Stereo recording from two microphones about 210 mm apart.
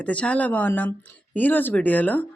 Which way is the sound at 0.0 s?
5° left (ahead or behind).